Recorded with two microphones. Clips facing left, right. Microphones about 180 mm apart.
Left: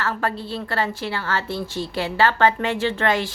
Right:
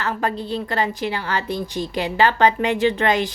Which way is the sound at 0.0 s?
15° right (ahead or behind).